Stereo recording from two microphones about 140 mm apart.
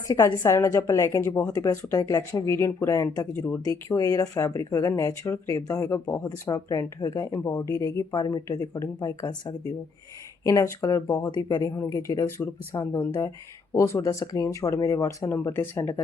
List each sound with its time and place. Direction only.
0.1 s speech: 20° left (ahead or behind)
1.5 s speech: 20° left (ahead or behind)
3.6 s speech: 25° left (ahead or behind)
7.3 s speech: 15° left (ahead or behind)